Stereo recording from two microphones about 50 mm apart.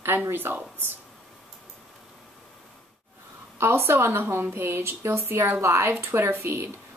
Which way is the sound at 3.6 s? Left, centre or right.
Right.